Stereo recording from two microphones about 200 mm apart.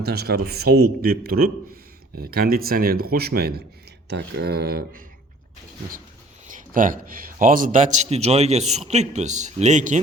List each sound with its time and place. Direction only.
0.0 s a man's voice: 55° right (ahead or behind)
6.5 s a man's voice: 40° right (ahead or behind)